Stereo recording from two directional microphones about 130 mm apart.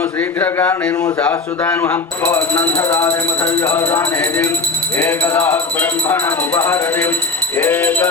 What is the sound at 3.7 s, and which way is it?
Speech, 20° left (ahead or behind).